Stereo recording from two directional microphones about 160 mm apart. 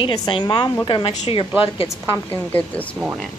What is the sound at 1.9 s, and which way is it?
Speech, 15° left (ahead or behind).